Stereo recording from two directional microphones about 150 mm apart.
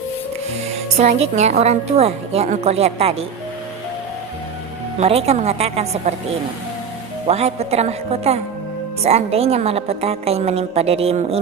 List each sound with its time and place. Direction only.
0.7 s a woman's voice: 45° right (ahead or behind)
4.9 s a woman's voice: 45° right (ahead or behind)
7.3 s a woman's voice: 45° right (ahead or behind)